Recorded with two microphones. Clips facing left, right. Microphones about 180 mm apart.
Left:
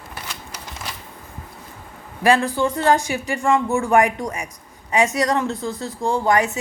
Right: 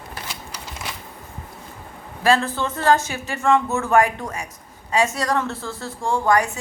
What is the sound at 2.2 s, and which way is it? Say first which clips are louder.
A woman's voice: left 2 dB; 15° left (ahead or behind).